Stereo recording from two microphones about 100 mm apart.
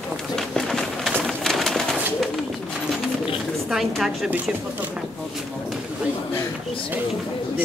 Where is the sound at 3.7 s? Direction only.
5° right (ahead or behind).